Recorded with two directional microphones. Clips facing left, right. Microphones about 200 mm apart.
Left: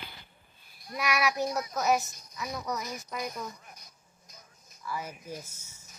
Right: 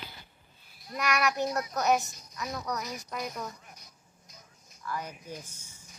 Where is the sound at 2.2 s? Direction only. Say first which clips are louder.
Even; centre (ahead or behind).